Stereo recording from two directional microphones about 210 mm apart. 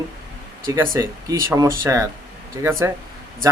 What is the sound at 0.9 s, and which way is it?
Speech, 15° right (ahead or behind).